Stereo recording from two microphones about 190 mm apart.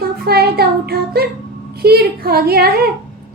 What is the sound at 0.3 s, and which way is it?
A woman's voice, 55° right (ahead or behind).